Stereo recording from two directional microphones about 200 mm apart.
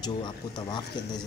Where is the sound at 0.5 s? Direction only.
20° left (ahead or behind).